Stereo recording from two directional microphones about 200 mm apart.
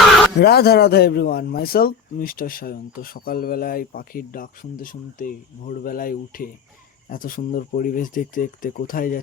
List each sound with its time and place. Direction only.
0.3 s a man's voice: 55° left (ahead or behind)